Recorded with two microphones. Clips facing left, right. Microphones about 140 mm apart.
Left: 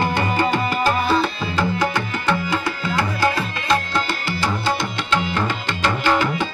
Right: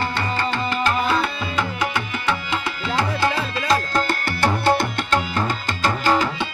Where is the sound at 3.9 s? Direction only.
55° right (ahead or behind).